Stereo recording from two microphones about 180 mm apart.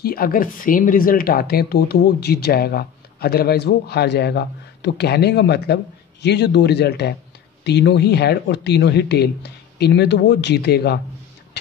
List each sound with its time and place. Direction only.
0.0 s speech: 55° left (ahead or behind)